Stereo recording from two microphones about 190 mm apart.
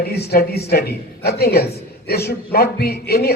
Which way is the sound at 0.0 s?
55° left (ahead or behind).